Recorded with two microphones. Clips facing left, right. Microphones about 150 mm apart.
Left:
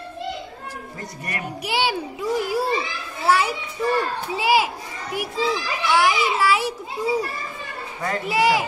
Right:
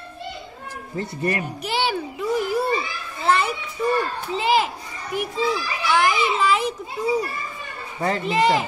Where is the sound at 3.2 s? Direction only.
5° left (ahead or behind).